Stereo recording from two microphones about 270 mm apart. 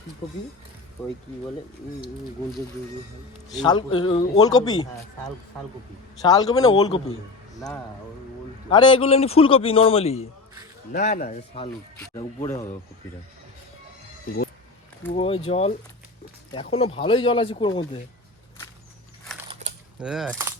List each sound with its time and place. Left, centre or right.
3.6 s speech: centre
6.2 s speech: centre
8.7 s a man's voice: centre
10.9 s speech: left
15.1 s a man's voice: left
19.2 s a sound: centre
20.0 s coin: centre